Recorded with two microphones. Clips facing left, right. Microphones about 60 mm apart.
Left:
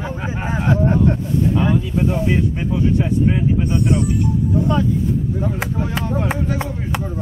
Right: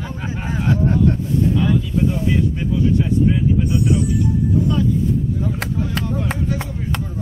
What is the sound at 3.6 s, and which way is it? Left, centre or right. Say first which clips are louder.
Speech: even; left.